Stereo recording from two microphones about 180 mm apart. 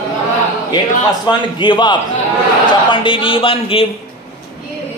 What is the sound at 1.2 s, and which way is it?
Speech, 25° left (ahead or behind).